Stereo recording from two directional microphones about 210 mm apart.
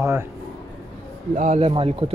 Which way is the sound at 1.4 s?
30° right (ahead or behind).